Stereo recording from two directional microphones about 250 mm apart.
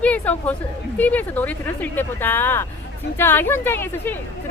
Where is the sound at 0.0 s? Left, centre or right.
Centre.